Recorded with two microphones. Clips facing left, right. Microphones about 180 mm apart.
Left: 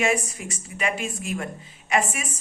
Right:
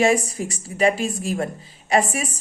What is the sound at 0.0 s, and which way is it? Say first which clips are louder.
A woman's voice: right 6 dB; 35° right (ahead or behind).